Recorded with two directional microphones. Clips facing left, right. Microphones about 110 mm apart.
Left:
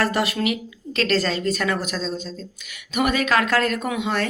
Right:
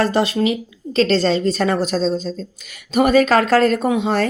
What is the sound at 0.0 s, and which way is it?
A woman's voice, 25° right (ahead or behind).